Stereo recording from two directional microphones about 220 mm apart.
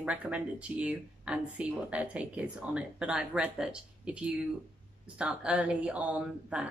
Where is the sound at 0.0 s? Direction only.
5° right (ahead or behind).